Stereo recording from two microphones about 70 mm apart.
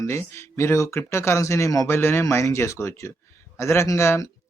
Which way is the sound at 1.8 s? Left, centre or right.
Left.